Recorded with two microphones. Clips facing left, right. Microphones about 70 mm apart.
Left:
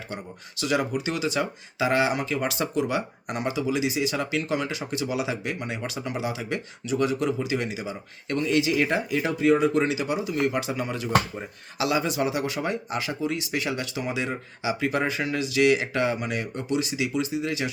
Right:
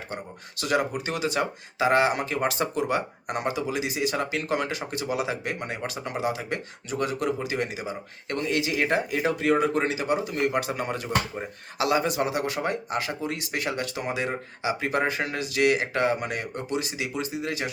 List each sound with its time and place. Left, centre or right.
0.6 s speech: right